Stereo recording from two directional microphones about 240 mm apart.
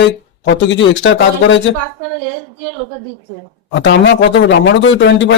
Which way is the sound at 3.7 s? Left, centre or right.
Left.